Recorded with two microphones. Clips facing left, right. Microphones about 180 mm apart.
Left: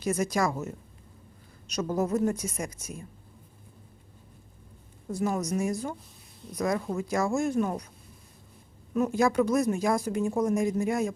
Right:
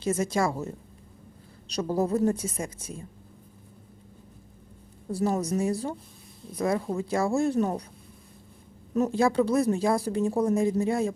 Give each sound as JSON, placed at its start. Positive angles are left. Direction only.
{"t": 0.0, "sound": "a woman's voice", "side_deg": -25}
{"t": 1.6, "sound": "speech", "side_deg": -35}
{"t": 5.1, "sound": "a woman's voice", "side_deg": -35}
{"t": 8.9, "sound": "speech", "side_deg": -35}